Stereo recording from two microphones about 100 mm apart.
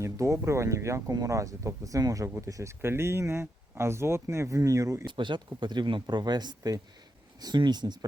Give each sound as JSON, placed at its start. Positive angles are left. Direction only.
{"t": 0.0, "sound": "speech", "side_deg": -30}
{"t": 5.0, "sound": "speech", "side_deg": -55}